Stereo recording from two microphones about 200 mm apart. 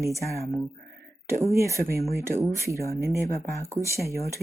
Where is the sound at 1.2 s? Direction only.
15° right (ahead or behind).